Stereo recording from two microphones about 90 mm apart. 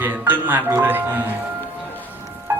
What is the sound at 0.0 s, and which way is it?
Music, 20° right (ahead or behind).